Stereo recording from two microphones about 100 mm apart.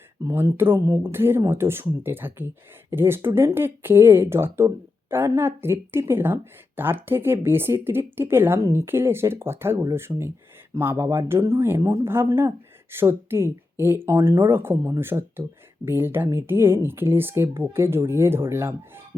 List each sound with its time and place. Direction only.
0.3 s speech: 25° right (ahead or behind)